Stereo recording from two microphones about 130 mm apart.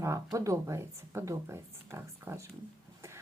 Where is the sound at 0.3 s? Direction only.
25° right (ahead or behind).